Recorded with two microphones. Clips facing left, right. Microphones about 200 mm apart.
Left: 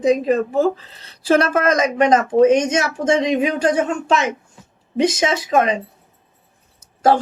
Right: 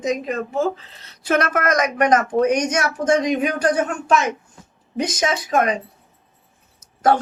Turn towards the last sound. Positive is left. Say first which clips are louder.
# left 2 dB
turn(degrees=25)  # may be behind; listen again after turning